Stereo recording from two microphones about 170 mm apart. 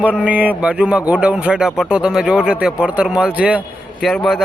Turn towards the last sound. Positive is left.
turn(degrees=0)  # may be behind; listen again after turning